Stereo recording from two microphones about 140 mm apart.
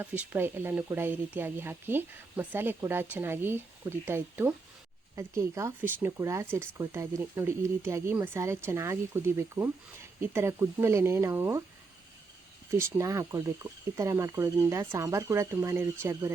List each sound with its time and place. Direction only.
0.0 s speech: 15° right (ahead or behind)
12.7 s speech: 20° right (ahead or behind)